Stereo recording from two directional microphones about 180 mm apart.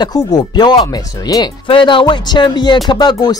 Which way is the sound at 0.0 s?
20° left (ahead or behind).